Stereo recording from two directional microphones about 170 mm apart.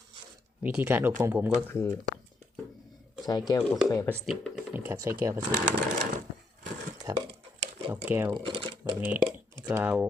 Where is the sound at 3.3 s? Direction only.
20° left (ahead or behind).